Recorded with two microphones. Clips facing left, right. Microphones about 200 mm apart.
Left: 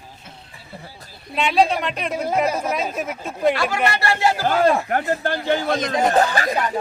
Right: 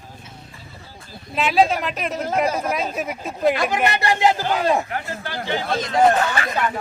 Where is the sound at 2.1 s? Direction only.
10° left (ahead or behind).